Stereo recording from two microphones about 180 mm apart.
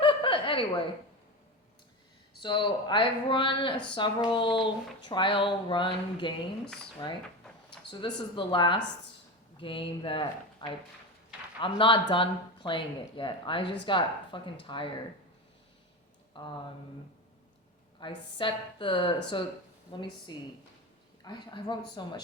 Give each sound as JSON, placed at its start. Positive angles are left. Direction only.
{"t": 0.0, "sound": "chuckle", "side_deg": 30}
{"t": 2.4, "sound": "speech", "side_deg": 25}
{"t": 16.4, "sound": "speech", "side_deg": 25}
{"t": 18.0, "sound": "speech", "side_deg": 25}